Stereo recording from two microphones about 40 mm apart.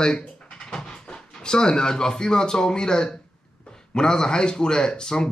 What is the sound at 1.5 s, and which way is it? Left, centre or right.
Speech, centre.